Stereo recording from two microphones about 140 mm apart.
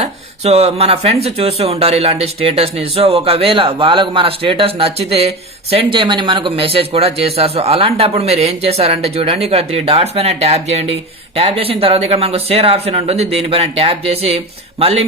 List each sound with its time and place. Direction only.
0.0 s speech: 50° right (ahead or behind)